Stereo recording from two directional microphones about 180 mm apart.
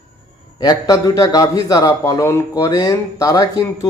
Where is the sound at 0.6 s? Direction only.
25° left (ahead or behind).